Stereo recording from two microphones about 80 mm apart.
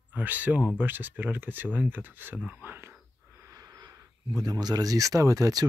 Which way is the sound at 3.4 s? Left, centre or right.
Right.